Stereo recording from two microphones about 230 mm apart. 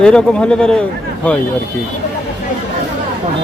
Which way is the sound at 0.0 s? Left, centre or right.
Centre.